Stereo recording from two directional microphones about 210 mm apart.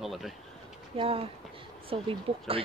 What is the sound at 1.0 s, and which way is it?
Speech, 25° right (ahead or behind).